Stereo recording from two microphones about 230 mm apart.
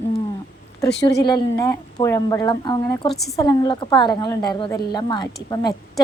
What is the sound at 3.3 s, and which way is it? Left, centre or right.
A woman's voice, centre.